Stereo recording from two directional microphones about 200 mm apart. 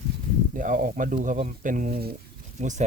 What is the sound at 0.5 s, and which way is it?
Speech, 40° right (ahead or behind).